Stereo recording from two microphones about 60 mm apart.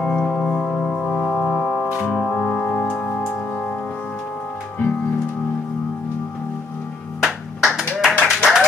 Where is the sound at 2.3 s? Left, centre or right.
Centre.